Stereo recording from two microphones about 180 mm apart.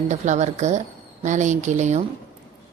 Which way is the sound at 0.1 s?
40° right (ahead or behind).